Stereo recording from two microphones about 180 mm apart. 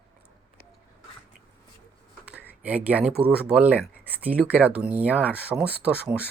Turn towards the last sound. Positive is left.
turn(degrees=-5)  # may be behind; listen again after turning